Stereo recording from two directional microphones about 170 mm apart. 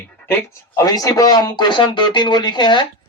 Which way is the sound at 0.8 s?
20° left (ahead or behind).